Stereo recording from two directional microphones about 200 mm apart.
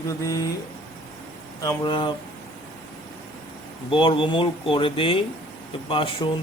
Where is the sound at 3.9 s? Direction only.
25° left (ahead or behind).